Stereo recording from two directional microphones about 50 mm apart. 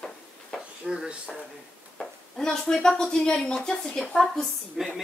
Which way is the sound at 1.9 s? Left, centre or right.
Centre.